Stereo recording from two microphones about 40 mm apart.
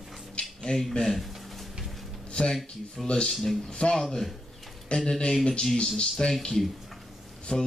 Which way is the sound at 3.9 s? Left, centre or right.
Centre.